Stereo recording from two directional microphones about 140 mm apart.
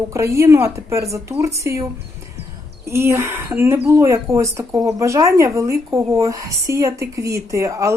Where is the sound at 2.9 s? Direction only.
20° right (ahead or behind).